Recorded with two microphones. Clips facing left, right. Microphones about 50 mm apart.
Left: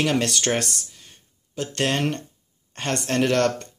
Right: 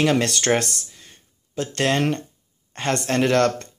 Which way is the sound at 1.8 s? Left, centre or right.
Right.